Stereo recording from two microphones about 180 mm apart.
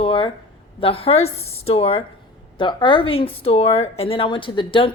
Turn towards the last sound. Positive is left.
turn(degrees=30)  # may be behind; listen again after turning